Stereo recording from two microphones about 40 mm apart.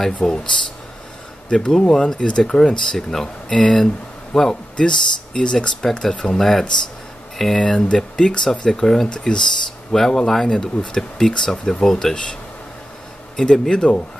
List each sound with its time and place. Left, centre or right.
0.0 s speech: centre
6.0 s speech: centre
8.7 s speech: centre
13.4 s speech: centre